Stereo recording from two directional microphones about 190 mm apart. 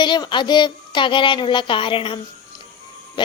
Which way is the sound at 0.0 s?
25° left (ahead or behind).